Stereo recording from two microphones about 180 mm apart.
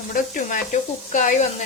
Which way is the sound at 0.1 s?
45° left (ahead or behind).